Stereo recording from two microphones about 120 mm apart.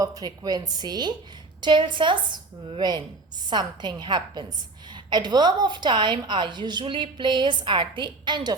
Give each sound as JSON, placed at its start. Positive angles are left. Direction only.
{"t": 0.0, "sound": "a woman's voice", "side_deg": -30}